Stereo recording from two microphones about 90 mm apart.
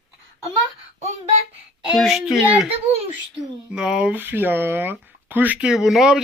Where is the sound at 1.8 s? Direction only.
5° right (ahead or behind).